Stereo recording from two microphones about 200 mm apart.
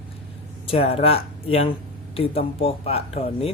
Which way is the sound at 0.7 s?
30° left (ahead or behind).